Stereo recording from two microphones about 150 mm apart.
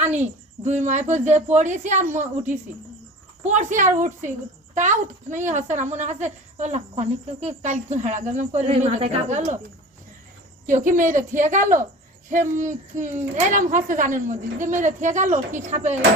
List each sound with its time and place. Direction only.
0.6 s speech: 50° right (ahead or behind)
3.4 s speech: 55° right (ahead or behind)
10.7 s speech: 55° right (ahead or behind)